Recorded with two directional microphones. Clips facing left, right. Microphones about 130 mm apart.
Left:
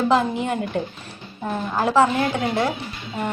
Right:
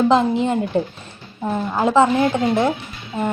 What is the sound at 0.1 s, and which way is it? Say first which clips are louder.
Speech: right 4 dB; 25° right (ahead or behind).